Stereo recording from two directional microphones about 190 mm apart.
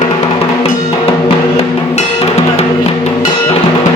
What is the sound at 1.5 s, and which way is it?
Drum, 35° left (ahead or behind).